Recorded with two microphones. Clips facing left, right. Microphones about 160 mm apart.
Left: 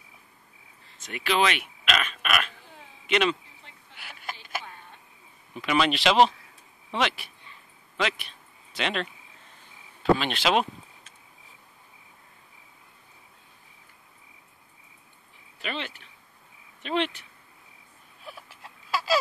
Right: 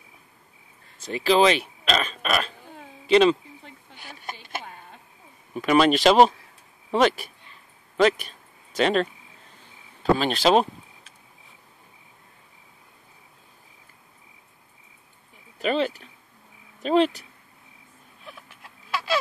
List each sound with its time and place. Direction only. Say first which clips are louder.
1.0 s speech: right 6 dB; 30° right (ahead or behind)
4.0 s a sound: right 2 dB; 30° right (ahead or behind)
5.5 s speech: right 6 dB; 45° right (ahead or behind)
10.1 s speech: right 8 dB; 40° right (ahead or behind)
15.6 s speech: right 11 dB; 40° right (ahead or behind)
18.3 s a sound: left 1 dB; 5° left (ahead or behind)